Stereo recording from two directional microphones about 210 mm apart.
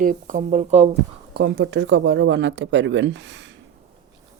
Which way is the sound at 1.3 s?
50° right (ahead or behind).